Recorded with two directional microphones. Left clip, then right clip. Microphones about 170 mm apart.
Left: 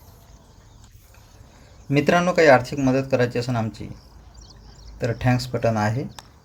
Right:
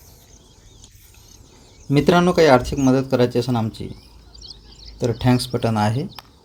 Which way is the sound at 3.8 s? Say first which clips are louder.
Right 5 dB; 35° right (ahead or behind).